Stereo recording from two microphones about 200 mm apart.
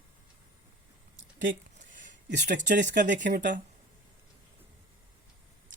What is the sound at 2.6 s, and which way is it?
Speech, 40° right (ahead or behind).